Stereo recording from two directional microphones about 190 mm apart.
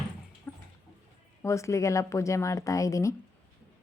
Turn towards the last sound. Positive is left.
turn(degrees=15)  # may be behind; listen again after turning